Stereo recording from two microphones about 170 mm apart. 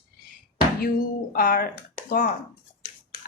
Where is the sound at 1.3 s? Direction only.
60° left (ahead or behind).